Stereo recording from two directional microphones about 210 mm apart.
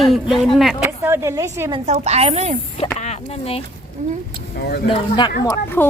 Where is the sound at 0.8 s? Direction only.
15° right (ahead or behind).